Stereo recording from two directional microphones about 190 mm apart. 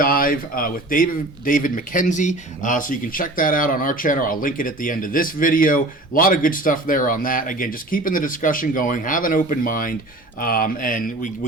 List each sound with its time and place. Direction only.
0.0 s speech: 50° left (ahead or behind)